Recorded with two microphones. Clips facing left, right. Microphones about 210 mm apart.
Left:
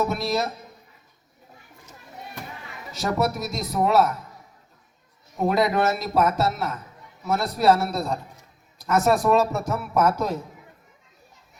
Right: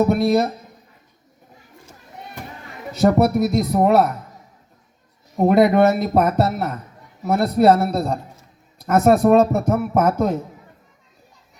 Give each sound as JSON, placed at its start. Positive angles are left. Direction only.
{"t": 0.0, "sound": "a man's voice", "side_deg": -55}
{"t": 3.0, "sound": "a man's voice", "side_deg": -55}
{"t": 5.4, "sound": "a man's voice", "side_deg": -55}